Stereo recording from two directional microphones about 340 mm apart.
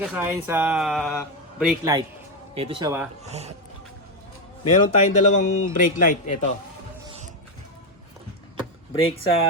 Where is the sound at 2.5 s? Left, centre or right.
Centre.